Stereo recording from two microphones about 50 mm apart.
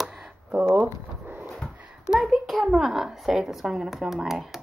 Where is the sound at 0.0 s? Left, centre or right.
Centre.